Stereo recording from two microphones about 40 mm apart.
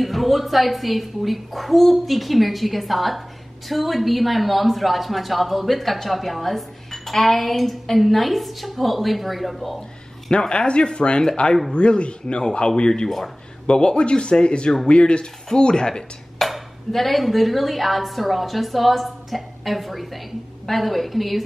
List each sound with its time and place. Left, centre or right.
0.0 s a woman's voice: centre
10.5 s speech: left
16.3 s a woman's voice: centre